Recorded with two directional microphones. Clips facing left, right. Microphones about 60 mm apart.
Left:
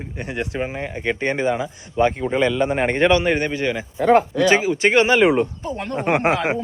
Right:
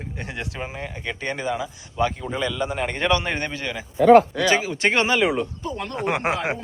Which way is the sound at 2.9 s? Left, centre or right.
Left.